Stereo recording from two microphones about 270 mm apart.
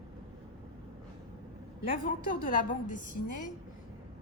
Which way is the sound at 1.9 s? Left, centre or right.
Left.